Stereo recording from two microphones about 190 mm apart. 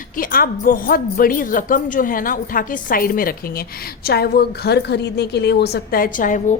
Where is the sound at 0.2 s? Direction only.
50° left (ahead or behind).